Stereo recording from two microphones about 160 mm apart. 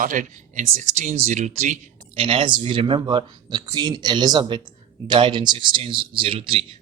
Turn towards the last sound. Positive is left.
turn(degrees=-35)  # may be behind; listen again after turning